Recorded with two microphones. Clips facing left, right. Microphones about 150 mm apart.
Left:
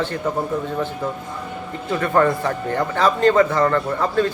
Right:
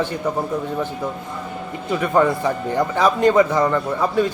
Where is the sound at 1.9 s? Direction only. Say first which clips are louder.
Even; 15° right (ahead or behind).